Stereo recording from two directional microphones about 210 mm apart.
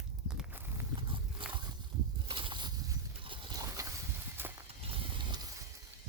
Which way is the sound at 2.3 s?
25° right (ahead or behind).